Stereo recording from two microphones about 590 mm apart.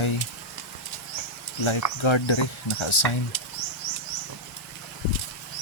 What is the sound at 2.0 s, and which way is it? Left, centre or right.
Speech, left.